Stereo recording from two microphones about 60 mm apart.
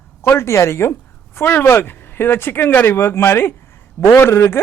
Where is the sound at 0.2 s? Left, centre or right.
Left.